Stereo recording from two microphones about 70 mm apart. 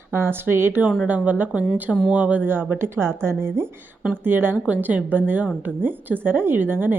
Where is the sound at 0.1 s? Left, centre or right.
Right.